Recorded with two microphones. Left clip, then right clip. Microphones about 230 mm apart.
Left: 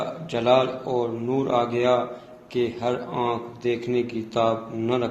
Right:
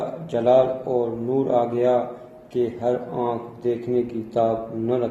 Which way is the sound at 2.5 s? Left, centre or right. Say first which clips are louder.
Right 2 dB; left.